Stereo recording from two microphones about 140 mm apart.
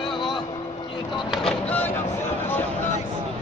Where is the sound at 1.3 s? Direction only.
10° left (ahead or behind).